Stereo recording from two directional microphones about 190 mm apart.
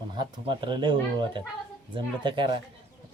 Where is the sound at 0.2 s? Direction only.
25° right (ahead or behind).